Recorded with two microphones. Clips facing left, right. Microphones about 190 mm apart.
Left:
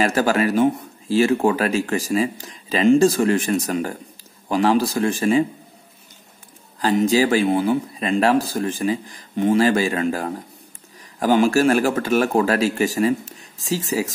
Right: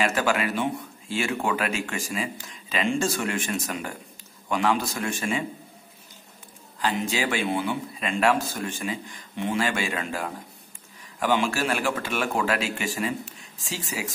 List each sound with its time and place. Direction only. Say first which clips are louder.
0.0 s speech: left 6 dB; 40° left (ahead or behind)
6.8 s speech: left 9 dB; 40° left (ahead or behind)